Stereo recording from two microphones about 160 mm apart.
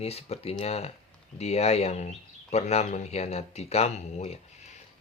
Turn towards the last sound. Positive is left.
turn(degrees=45)  # may be behind; listen again after turning